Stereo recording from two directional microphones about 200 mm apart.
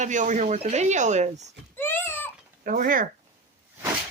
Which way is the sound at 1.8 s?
10° left (ahead or behind).